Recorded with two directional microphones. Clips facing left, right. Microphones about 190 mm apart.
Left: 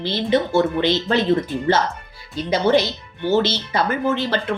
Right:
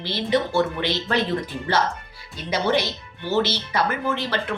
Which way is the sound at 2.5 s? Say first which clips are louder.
Left 5 dB; 25° left (ahead or behind).